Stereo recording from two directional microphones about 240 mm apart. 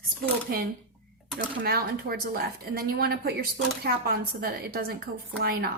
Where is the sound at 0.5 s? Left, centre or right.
Right.